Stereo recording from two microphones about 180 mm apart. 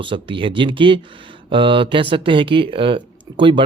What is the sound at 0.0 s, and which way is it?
Speech, 30° right (ahead or behind).